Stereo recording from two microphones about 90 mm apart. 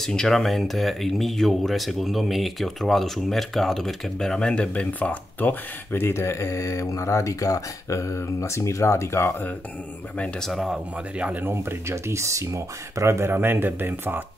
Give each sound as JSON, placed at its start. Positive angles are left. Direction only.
{"t": 0.0, "sound": "speech", "side_deg": 5}
{"t": 10.1, "sound": "speech", "side_deg": 10}
{"t": 11.4, "sound": "speech", "side_deg": -30}